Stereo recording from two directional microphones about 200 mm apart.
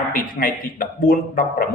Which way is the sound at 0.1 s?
45° left (ahead or behind).